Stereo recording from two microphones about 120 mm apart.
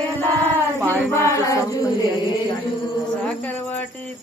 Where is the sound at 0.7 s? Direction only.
15° right (ahead or behind).